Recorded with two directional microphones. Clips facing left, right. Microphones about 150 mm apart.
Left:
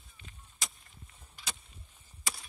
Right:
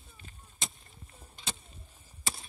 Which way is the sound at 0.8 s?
40° right (ahead or behind).